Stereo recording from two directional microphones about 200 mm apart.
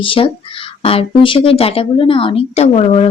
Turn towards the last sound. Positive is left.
turn(degrees=35)  # may be behind; listen again after turning